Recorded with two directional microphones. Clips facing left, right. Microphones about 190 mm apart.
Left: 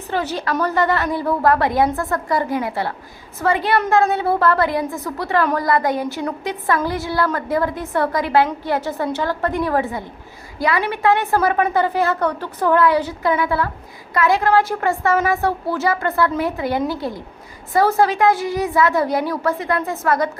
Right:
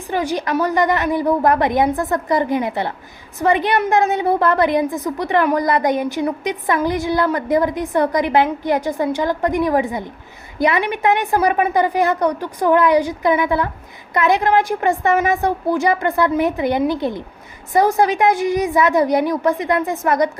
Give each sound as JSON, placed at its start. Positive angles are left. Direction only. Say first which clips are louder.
{"t": 0.1, "sound": "a woman's voice", "louder": "right 2 dB", "side_deg": -15}